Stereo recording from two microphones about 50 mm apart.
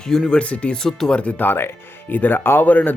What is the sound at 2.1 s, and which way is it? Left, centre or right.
Speech, left.